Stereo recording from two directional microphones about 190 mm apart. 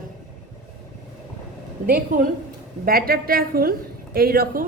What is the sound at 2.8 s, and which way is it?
A woman's voice, 50° right (ahead or behind).